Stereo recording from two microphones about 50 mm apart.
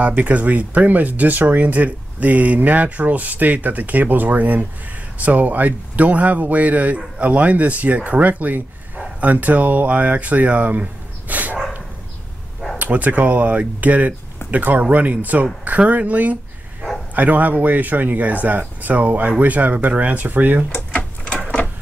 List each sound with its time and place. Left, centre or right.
0.0 s speech: right
12.7 s speech: right
20.7 s printer: left